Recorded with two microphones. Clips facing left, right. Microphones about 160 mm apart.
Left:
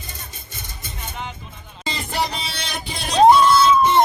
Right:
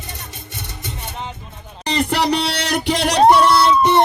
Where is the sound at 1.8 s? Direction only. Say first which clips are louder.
Right 7 dB; 80° right.